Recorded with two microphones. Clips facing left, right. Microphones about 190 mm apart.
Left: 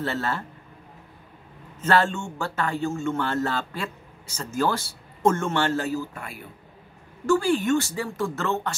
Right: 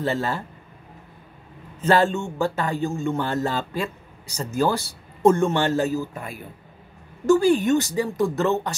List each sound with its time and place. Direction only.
0.0 s speech: 15° right (ahead or behind)
1.8 s speech: 15° right (ahead or behind)